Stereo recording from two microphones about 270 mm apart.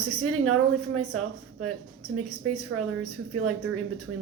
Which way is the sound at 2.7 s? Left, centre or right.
Right.